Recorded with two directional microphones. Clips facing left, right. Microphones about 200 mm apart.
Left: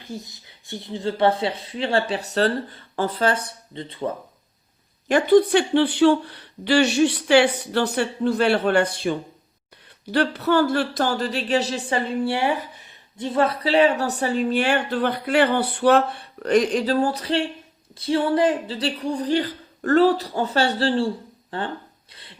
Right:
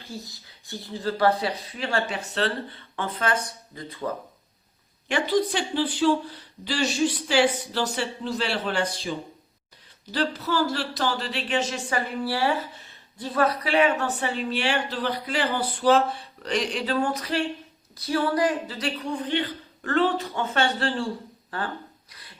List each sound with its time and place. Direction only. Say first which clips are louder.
0.0 s speech: left 3 dB; 20° left (ahead or behind)
5.0 s speech: left 8 dB; 50° left (ahead or behind); by 21.7 s 25° left (ahead or behind)
22.1 s beatboxing: left 3 dB; 25° left (ahead or behind)